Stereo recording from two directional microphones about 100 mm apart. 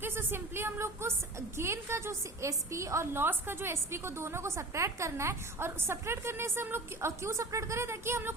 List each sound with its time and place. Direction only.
0.0 s a woman's voice: 25° right (ahead or behind)